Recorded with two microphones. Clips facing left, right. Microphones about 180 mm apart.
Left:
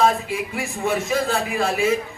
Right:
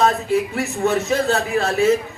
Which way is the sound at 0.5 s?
10° left (ahead or behind).